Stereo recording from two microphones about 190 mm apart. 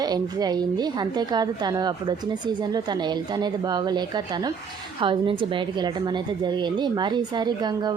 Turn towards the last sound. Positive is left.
turn(degrees=-20)  # may be behind; listen again after turning